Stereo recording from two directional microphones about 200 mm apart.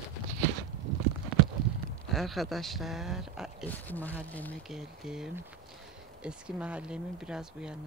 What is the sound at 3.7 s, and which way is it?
Speech, 10° left (ahead or behind).